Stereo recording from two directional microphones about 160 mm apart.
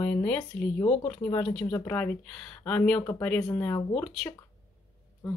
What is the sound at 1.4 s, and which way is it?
Speech, 5° left (ahead or behind).